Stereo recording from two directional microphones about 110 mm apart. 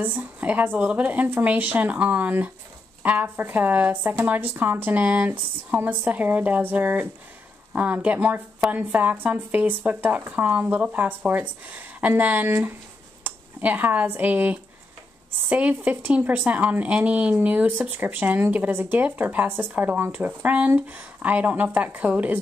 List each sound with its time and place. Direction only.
0.0 s speech: 15° right (ahead or behind)